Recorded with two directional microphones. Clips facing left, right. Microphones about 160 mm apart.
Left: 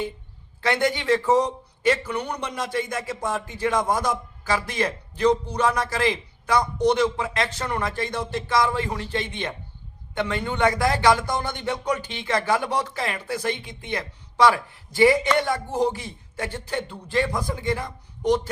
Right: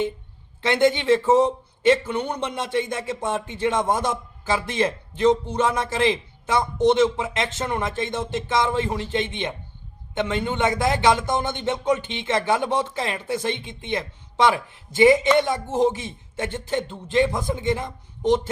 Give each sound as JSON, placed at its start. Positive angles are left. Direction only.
{"t": 0.6, "sound": "a man's voice", "side_deg": -25}